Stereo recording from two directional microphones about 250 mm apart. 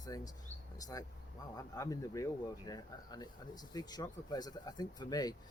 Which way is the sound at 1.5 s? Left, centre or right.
Centre.